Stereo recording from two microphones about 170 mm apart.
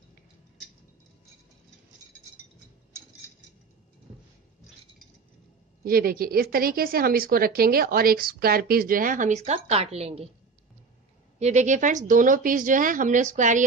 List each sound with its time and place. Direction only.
5.9 s a woman's voice: 60° right (ahead or behind); by 10.3 s 35° right (ahead or behind)
11.3 s speech: 40° right (ahead or behind)